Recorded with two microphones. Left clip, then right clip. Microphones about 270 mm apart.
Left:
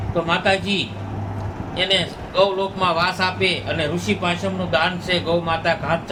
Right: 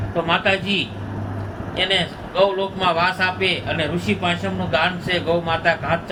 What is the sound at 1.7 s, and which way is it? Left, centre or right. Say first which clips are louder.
A man's voice: even; left.